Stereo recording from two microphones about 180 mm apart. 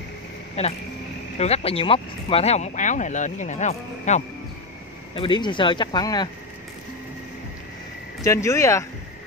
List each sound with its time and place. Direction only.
0.6 s speech: 35° left (ahead or behind)
5.1 s speech: 25° left (ahead or behind)
8.2 s speech: 15° left (ahead or behind)